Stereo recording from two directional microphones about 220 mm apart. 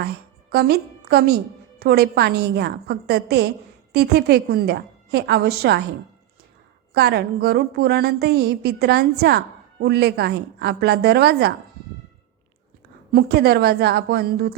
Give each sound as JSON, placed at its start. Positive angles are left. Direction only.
{"t": 0.5, "sound": "a woman's voice", "side_deg": -45}
{"t": 6.9, "sound": "a woman's voice", "side_deg": -50}
{"t": 13.1, "sound": "a woman's voice", "side_deg": -45}